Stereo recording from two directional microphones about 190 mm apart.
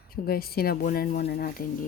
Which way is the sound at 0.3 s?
55° left (ahead or behind).